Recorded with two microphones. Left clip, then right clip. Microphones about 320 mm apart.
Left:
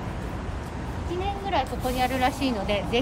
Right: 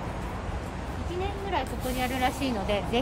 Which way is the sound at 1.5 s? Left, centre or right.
Centre.